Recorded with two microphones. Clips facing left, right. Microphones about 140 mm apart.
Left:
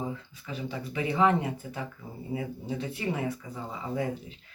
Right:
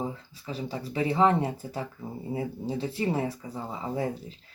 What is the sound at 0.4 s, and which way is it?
Speech, 35° right (ahead or behind).